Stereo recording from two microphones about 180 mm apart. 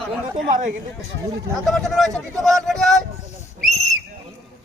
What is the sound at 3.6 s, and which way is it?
Whistle, centre (ahead or behind).